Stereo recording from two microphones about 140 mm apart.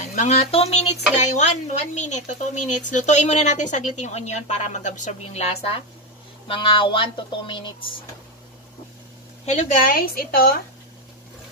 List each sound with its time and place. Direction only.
0.0 s speech: 60° left (ahead or behind); by 7.9 s 35° left (ahead or behind)
9.5 s a woman's voice: 65° left (ahead or behind); by 10.6 s 90° left